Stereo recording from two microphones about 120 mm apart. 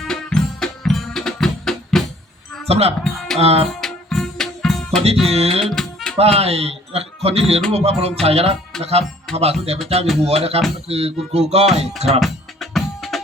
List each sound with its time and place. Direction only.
0.0 s music: 5° left (ahead or behind)
2.6 s speech: 60° right (ahead or behind)
3.8 s music: 5° left (ahead or behind)
5.2 s speech: 60° right (ahead or behind)
5.6 s music: 5° left (ahead or behind)
6.1 s speech: 60° right (ahead or behind)
12.2 s music: centre (ahead or behind)